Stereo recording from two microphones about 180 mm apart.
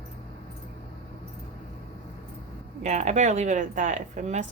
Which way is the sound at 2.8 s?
40° right (ahead or behind).